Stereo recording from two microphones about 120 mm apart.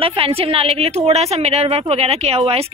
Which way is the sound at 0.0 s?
50° right (ahead or behind).